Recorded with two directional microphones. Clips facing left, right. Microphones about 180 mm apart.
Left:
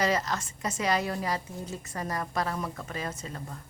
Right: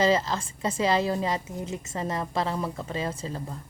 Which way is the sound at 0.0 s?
25° right (ahead or behind).